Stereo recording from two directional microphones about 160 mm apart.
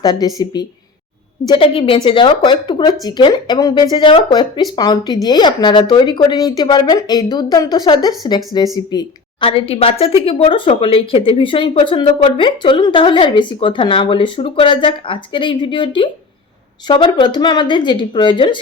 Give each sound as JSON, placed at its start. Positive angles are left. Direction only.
{"t": 0.0, "sound": "speech", "side_deg": 25}
{"t": 1.5, "sound": "a woman's voice", "side_deg": 35}
{"t": 9.5, "sound": "a woman's voice", "side_deg": 35}